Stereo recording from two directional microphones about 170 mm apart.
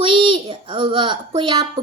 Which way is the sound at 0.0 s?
30° right (ahead or behind).